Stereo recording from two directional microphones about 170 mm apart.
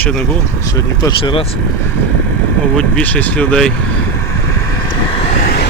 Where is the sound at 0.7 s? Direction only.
25° left (ahead or behind).